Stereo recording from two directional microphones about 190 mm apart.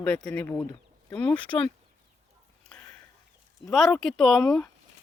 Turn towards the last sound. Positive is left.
turn(degrees=0)  # may be behind; listen again after turning